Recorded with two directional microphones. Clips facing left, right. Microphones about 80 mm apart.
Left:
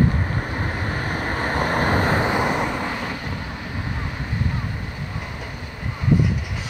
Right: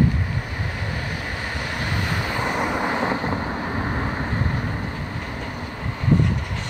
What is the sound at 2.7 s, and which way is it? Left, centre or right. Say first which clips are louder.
Vehicle: right 4 dB; right.